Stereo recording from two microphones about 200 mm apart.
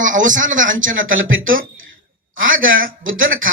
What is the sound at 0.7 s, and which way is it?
Speech, 75° right (ahead or behind).